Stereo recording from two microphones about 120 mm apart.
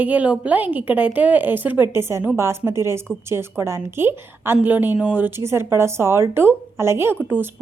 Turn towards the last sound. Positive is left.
turn(degrees=-15)  # may be behind; listen again after turning